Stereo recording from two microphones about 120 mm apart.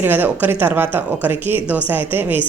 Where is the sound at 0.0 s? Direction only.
15° right (ahead or behind).